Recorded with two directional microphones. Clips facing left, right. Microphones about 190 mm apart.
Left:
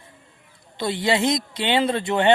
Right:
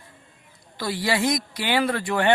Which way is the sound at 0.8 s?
25° left (ahead or behind).